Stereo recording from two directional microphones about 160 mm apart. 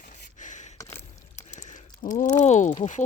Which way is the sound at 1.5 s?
50° left (ahead or behind).